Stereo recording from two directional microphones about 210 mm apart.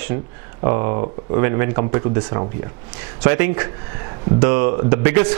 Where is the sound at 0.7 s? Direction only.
15° right (ahead or behind).